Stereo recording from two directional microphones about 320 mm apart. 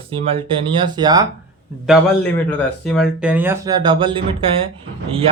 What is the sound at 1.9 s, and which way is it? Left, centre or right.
Speech, centre.